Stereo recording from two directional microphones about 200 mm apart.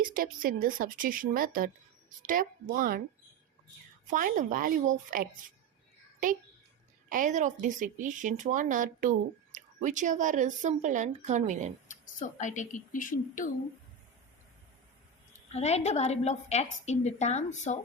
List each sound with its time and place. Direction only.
0.0 s speech: 45° right (ahead or behind)
4.1 s speech: 40° right (ahead or behind)
7.1 s speech: 40° right (ahead or behind)
11.9 s a woman's voice: 40° left (ahead or behind)
15.5 s a woman's voice: 30° left (ahead or behind)